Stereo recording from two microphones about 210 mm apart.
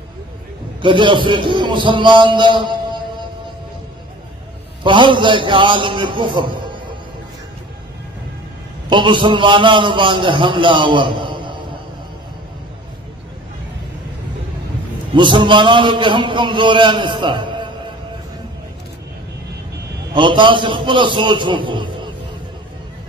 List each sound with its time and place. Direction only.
0.8 s a man's voice: 25° right (ahead or behind)
4.8 s a man's voice: 25° right (ahead or behind)
8.8 s a man's voice: 25° right (ahead or behind)
15.1 s a man's voice: 25° right (ahead or behind)
20.2 s a man's voice: 25° right (ahead or behind)